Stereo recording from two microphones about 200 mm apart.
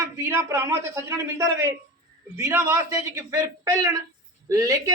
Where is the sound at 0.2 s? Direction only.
15° right (ahead or behind).